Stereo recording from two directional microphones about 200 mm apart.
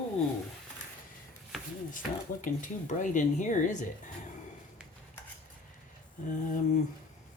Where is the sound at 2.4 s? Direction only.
40° left (ahead or behind).